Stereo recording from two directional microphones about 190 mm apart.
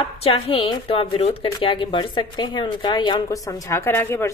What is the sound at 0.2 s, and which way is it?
Speech, 30° left (ahead or behind).